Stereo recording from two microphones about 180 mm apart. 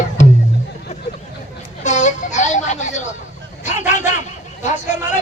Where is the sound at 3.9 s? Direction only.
40° left (ahead or behind).